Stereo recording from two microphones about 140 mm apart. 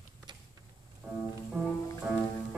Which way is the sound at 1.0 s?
20° right (ahead or behind).